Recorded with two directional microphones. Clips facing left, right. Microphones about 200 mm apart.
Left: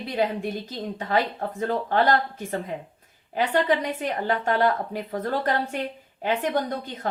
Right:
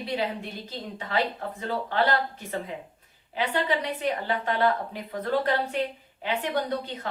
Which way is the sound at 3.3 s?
45° left (ahead or behind).